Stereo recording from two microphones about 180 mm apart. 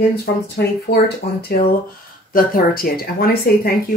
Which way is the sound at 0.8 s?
60° left (ahead or behind).